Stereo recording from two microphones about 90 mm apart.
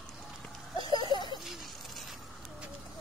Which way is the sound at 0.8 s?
55° left (ahead or behind).